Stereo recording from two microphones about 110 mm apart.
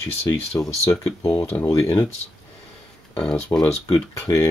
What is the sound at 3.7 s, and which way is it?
Speech, 25° left (ahead or behind).